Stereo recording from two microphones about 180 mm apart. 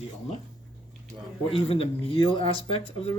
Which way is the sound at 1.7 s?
30° left (ahead or behind).